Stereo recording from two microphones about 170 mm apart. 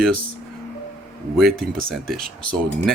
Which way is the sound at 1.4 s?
Centre (ahead or behind).